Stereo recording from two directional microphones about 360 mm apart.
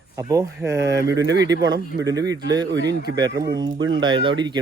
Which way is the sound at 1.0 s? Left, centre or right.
Right.